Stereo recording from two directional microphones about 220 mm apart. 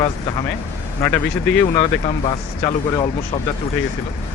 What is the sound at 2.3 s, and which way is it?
Speech, 20° left (ahead or behind).